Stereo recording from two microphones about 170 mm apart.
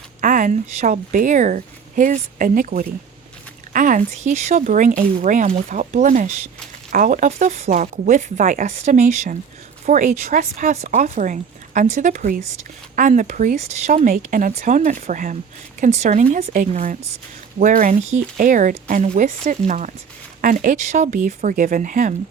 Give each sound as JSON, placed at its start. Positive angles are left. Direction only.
{"t": 0.2, "sound": "a woman's voice", "side_deg": -50}